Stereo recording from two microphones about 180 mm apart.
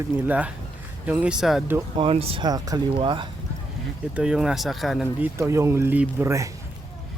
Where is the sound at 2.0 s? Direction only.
30° right (ahead or behind).